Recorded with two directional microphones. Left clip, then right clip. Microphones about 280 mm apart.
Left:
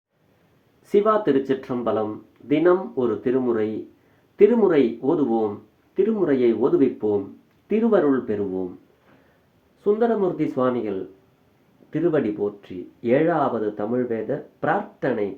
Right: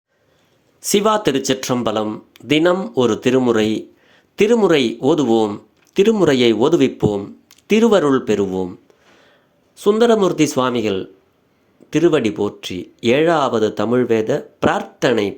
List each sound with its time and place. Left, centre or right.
0.9 s speech: right
5.0 s speech: right
9.8 s speech: right